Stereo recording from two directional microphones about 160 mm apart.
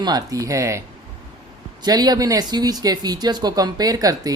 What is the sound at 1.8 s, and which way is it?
Speech, 25° right (ahead or behind).